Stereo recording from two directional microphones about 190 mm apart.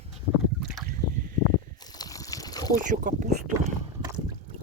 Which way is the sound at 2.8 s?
45° right (ahead or behind).